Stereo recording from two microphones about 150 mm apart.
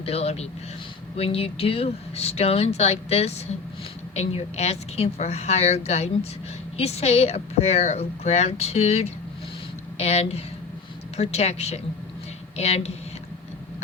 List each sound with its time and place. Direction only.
0.0 s speech: 45° left (ahead or behind)